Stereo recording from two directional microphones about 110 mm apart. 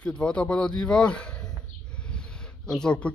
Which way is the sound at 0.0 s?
10° left (ahead or behind).